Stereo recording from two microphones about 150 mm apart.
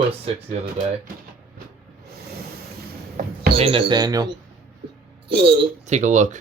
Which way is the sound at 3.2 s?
60° right (ahead or behind).